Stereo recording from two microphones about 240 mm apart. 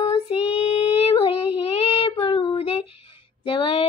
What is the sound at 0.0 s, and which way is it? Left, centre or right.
Child singing, left.